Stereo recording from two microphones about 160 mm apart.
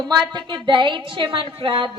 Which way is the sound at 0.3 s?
30° right (ahead or behind).